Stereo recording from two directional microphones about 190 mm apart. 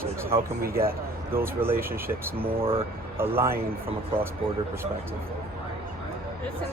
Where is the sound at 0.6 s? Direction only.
50° right (ahead or behind).